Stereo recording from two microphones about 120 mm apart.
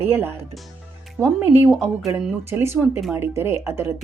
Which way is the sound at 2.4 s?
20° right (ahead or behind).